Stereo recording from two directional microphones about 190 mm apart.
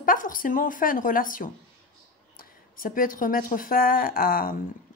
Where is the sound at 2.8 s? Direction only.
45° left (ahead or behind).